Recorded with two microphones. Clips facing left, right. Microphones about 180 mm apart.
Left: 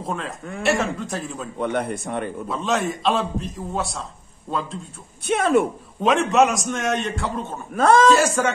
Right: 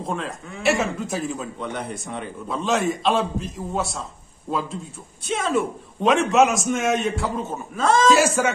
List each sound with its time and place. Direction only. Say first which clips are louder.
0.0 s a man's voice: even; centre (ahead or behind)
1.6 s speech: left 6 dB; 55° left (ahead or behind)
2.4 s a man's voice: right 3 dB; centre (ahead or behind)
5.2 s speech: left 4 dB; 60° left (ahead or behind)
6.0 s a man's voice: even; centre (ahead or behind)
7.7 s speech: left 4 dB; 60° left (ahead or behind)
8.4 s speech: even; 5° right (ahead or behind)